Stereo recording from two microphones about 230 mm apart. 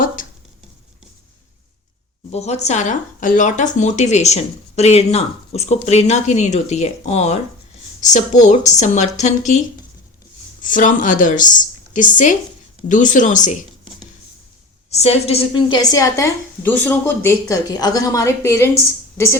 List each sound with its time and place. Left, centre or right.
2.3 s speech: left
10.6 s speech: left
14.8 s a woman's voice: left